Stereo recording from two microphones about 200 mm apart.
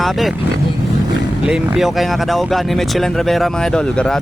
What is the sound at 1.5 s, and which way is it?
Speech, centre (ahead or behind).